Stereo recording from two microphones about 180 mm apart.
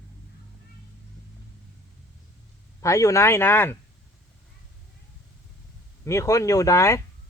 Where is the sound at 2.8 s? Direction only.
15° left (ahead or behind).